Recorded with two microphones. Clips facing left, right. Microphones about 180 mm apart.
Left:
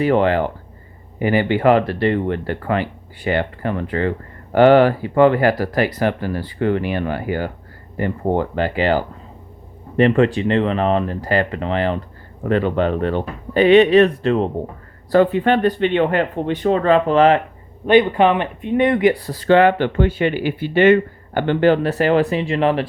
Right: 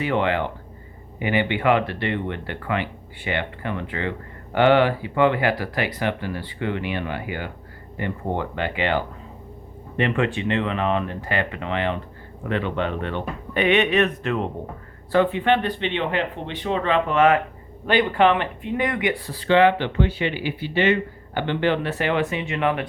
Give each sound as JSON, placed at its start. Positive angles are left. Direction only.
{"t": 0.0, "sound": "speech", "side_deg": 40}
{"t": 17.8, "sound": "speech", "side_deg": 20}